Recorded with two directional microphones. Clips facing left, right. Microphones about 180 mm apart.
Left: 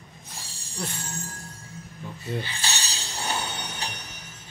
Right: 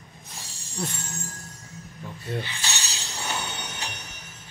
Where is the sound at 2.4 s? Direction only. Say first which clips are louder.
Left 1 dB; 30° left (ahead or behind).